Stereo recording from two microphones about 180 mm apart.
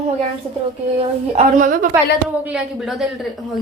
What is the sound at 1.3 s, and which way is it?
Speech, 45° right (ahead or behind).